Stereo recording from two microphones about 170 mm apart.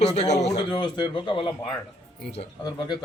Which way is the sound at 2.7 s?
25° left (ahead or behind).